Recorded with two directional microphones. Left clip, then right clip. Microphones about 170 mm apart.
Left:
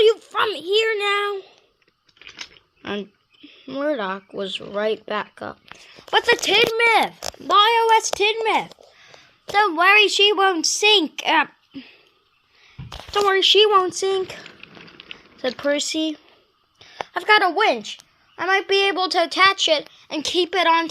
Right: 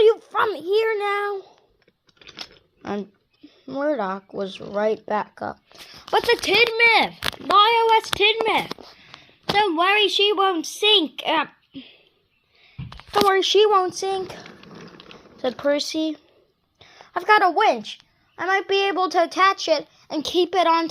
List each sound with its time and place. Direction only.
0.0 s a sound: 5° right (ahead or behind)
0.7 s speech: centre (ahead or behind)
2.8 s speech: 5° left (ahead or behind)
3.4 s a sound: 35° right (ahead or behind)
3.7 s speech: 5° left (ahead or behind); by 9.8 s 25° left (ahead or behind)
9.8 s a woman's voice: 65° left (ahead or behind)
10.2 s speech: 20° left (ahead or behind)
13.2 s speech: 10° right (ahead or behind)
13.8 s speech: 25° left (ahead or behind)
14.6 s ratchet: 55° right (ahead or behind)
15.0 s a sound: 60° right (ahead or behind)
15.4 s speech: 5° left (ahead or behind)
16.7 s a sound: centre (ahead or behind)
17.6 s speech: 15° left (ahead or behind); by 20.9 s centre (ahead or behind)